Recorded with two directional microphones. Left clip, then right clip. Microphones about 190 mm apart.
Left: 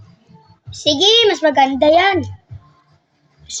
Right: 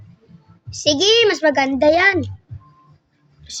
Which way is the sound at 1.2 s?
30° right (ahead or behind).